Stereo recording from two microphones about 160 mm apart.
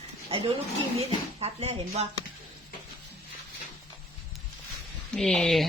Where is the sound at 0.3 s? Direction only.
35° right (ahead or behind).